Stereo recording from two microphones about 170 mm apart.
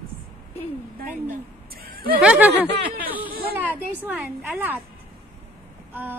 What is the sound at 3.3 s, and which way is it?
Speech, 65° right (ahead or behind).